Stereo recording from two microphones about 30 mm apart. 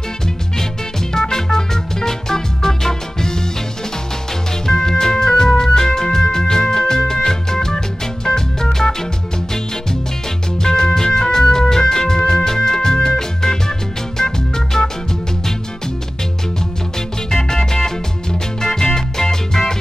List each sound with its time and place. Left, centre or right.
1.1 s music: centre
4.6 s music: centre
10.6 s music: centre
17.3 s music: centre